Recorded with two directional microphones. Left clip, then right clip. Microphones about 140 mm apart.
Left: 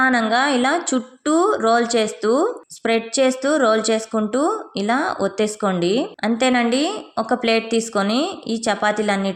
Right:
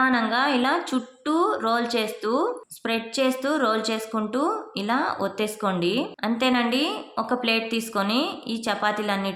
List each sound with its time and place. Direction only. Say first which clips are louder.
0.0 s speech: left 5 dB; 40° left (ahead or behind)